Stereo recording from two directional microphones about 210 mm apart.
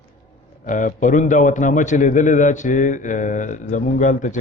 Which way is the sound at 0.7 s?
40° left (ahead or behind).